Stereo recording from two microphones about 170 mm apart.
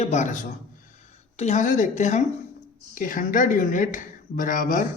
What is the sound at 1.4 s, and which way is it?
Speech, 45° left (ahead or behind).